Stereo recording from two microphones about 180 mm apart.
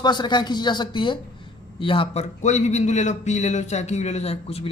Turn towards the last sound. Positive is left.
turn(degrees=35)  # may be behind; listen again after turning